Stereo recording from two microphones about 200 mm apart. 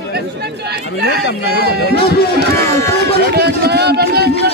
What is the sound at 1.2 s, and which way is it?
Speech, 55° left (ahead or behind).